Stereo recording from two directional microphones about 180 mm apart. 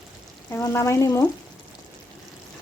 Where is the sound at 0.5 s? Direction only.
15° left (ahead or behind).